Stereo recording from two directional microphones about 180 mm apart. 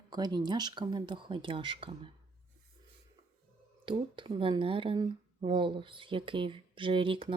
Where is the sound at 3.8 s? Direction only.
25° right (ahead or behind).